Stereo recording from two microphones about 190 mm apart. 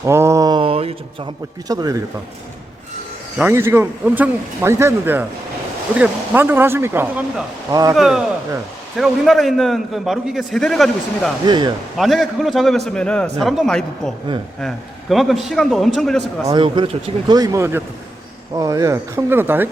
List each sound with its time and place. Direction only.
0.0 s a sound: 15° right (ahead or behind); by 0.9 s 30° right (ahead or behind)
1.6 s speech: 20° right (ahead or behind)
3.3 s speech: 10° right (ahead or behind)
7.9 s a man's voice: 5° right (ahead or behind)
11.4 s speech: 20° right (ahead or behind)
11.9 s a man's voice: centre (ahead or behind)
15.1 s a man's voice: centre (ahead or behind)
16.4 s speech: 20° right (ahead or behind)